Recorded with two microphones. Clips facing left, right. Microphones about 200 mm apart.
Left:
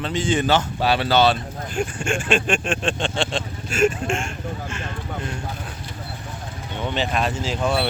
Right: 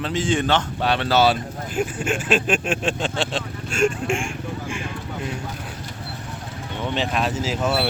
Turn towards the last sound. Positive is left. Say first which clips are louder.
# even
turn(degrees=-5)  # may be behind; listen again after turning